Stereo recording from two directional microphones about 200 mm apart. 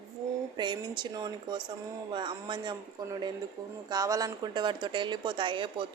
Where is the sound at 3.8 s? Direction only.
15° right (ahead or behind).